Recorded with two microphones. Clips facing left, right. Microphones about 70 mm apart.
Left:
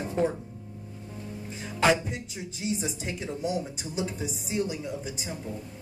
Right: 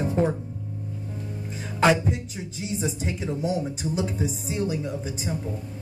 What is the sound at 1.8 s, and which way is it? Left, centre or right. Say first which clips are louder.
Speech: right 3 dB; right.